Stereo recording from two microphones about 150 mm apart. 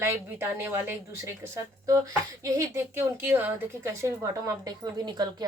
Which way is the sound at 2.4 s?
20° right (ahead or behind).